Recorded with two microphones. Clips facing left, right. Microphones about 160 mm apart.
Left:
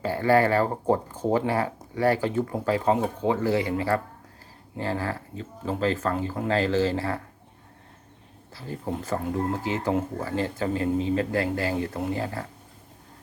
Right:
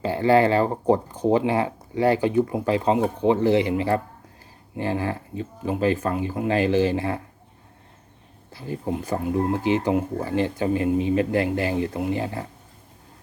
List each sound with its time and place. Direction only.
0.0 s speech: 20° right (ahead or behind)
8.5 s speech: 15° right (ahead or behind)